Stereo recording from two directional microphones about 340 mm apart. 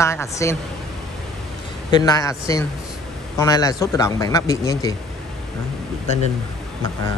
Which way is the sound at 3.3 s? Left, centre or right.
Centre.